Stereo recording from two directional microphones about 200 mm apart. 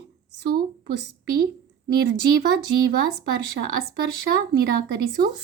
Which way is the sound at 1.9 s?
55° right (ahead or behind).